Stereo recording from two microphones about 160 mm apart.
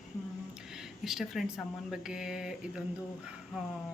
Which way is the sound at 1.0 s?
Centre (ahead or behind).